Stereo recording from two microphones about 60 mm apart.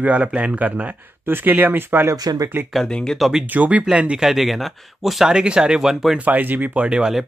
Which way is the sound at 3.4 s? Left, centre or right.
Right.